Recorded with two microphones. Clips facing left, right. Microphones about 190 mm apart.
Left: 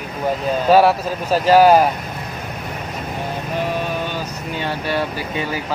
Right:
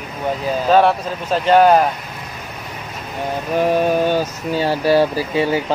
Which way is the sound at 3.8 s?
45° right (ahead or behind).